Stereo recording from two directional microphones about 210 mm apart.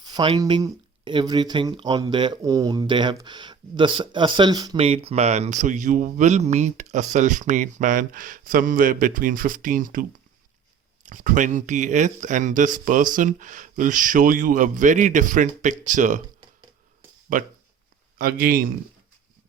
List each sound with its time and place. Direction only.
0.0 s speech: 20° right (ahead or behind); by 16.2 s 35° right (ahead or behind)
17.3 s speech: 40° right (ahead or behind)